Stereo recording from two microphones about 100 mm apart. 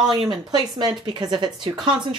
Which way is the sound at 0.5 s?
50° right (ahead or behind).